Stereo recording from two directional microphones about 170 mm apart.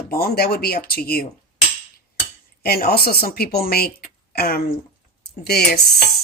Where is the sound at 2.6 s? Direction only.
65° left (ahead or behind).